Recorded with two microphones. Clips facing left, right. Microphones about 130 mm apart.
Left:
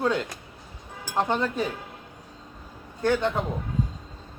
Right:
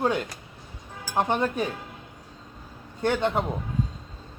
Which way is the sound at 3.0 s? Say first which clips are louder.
Left 1 dB; 20° right (ahead or behind).